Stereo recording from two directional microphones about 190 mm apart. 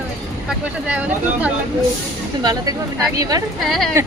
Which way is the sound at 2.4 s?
20° right (ahead or behind).